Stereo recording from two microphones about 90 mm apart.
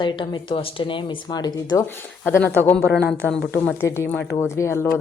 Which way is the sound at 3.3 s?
5° left (ahead or behind).